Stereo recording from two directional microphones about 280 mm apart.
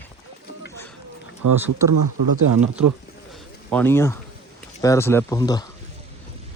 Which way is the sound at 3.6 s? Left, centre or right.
Centre.